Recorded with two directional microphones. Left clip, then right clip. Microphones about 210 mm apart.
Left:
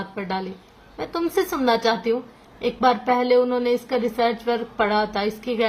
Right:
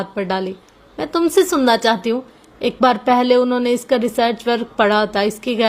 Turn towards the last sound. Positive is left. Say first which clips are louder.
# right 5 dB
turn(degrees=-45)  # may be behind; listen again after turning